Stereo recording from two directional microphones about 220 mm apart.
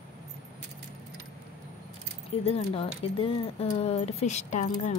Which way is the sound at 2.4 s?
25° left (ahead or behind).